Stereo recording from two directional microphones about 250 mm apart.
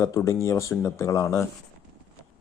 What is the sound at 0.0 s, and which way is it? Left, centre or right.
A man's voice, centre.